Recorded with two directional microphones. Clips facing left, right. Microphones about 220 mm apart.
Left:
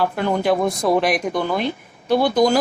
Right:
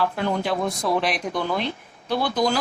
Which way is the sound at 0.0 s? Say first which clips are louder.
Left 4 dB; 55° left (ahead or behind).